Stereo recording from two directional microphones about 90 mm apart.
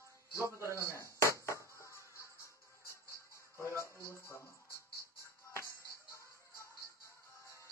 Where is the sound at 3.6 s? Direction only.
30° left (ahead or behind).